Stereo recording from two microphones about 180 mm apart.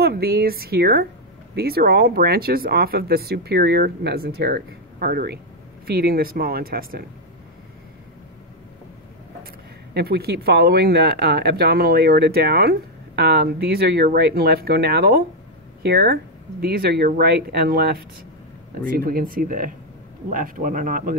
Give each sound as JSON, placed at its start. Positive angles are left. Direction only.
{"t": 0.0, "sound": "speech", "side_deg": -60}
{"t": 9.9, "sound": "speech", "side_deg": -60}